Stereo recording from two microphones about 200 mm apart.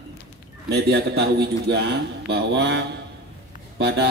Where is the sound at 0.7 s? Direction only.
55° right (ahead or behind).